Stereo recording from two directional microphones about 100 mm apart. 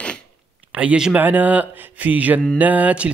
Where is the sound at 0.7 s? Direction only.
10° right (ahead or behind).